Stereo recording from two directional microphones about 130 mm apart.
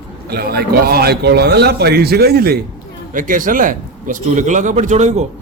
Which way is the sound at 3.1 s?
90° right.